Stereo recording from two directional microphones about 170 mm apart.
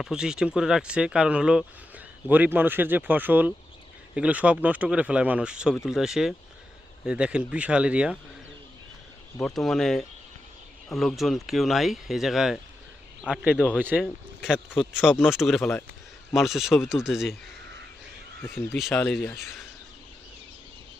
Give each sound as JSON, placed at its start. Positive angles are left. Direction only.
{"t": 0.0, "sound": "speech", "side_deg": -5}
{"t": 9.4, "sound": "speech", "side_deg": 0}
{"t": 14.0, "sound": "speech", "side_deg": 5}
{"t": 18.4, "sound": "speech", "side_deg": 15}